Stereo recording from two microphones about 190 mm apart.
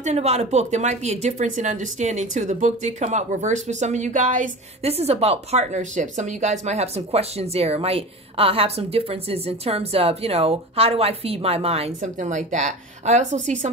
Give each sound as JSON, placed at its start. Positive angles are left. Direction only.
{"t": 0.0, "sound": "speech", "side_deg": -35}